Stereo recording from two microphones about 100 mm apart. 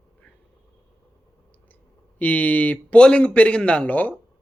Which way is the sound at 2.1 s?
15° left (ahead or behind).